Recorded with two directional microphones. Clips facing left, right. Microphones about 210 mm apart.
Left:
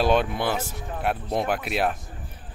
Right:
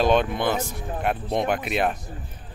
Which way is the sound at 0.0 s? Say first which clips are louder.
Right 2 dB; 5° left (ahead or behind).